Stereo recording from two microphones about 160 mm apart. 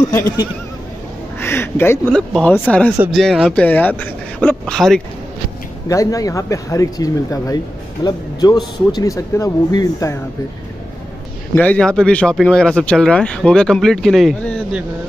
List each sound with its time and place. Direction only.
1.4 s speech: 15° left (ahead or behind)
5.9 s speech: 20° left (ahead or behind)
11.5 s speech: 10° left (ahead or behind)